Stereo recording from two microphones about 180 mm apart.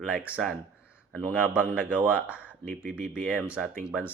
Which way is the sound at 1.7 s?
5° right (ahead or behind).